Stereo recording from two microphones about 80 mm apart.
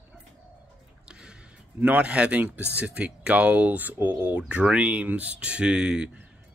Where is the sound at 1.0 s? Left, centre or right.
Centre.